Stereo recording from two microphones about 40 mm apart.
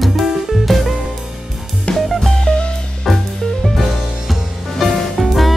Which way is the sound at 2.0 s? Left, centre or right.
Centre.